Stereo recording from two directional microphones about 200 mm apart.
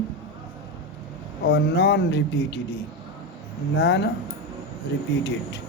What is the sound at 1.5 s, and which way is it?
Speech, 55° left (ahead or behind).